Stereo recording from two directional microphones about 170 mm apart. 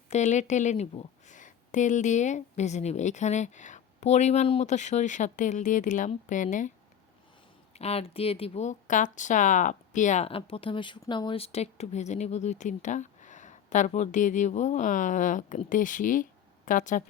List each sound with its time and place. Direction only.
0.1 s speech: 45° left (ahead or behind)
7.7 s speech: 40° left (ahead or behind)